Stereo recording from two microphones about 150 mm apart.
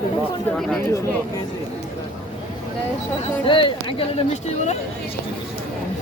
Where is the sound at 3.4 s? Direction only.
35° left (ahead or behind).